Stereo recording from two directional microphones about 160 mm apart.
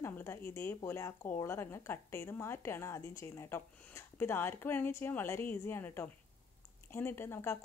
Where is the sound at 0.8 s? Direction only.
20° left (ahead or behind).